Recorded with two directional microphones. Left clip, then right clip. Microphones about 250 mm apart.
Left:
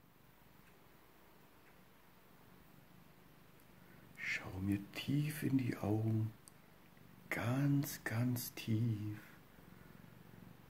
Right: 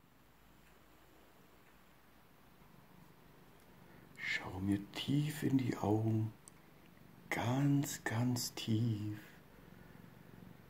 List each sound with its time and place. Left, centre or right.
4.2 s a sound: centre
5.1 s speech: centre
7.2 s speech: centre